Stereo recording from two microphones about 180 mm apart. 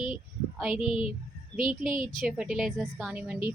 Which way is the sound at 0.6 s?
5° right (ahead or behind).